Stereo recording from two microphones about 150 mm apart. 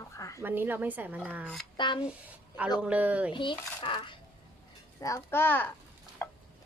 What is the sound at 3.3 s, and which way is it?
Speech, 35° left (ahead or behind).